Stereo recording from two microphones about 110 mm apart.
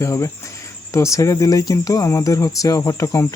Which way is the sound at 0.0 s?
25° left (ahead or behind).